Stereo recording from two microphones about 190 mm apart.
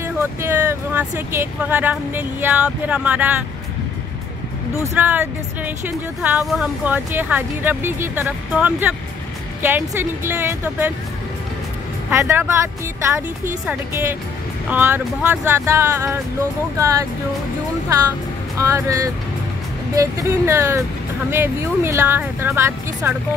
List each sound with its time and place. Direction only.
0.0 s speech: 15° right (ahead or behind)
4.9 s speech: 10° right (ahead or behind)
12.1 s speech: 15° right (ahead or behind)
18.6 s speech: 15° right (ahead or behind)